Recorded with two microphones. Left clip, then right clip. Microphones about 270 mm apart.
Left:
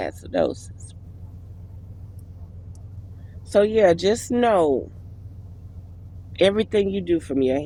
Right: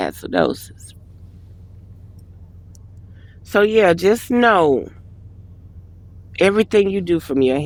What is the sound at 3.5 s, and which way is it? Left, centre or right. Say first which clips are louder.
Speech: right 3 dB; right.